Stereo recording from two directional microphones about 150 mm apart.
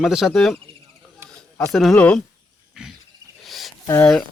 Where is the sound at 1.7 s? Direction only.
Centre (ahead or behind).